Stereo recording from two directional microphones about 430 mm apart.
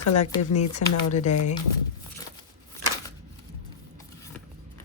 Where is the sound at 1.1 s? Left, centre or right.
Centre.